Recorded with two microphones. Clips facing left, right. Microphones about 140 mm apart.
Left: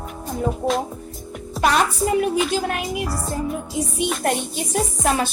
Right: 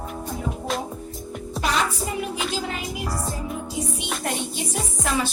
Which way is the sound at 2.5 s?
60° left (ahead or behind).